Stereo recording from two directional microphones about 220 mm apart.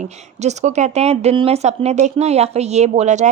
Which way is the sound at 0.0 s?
30° right (ahead or behind).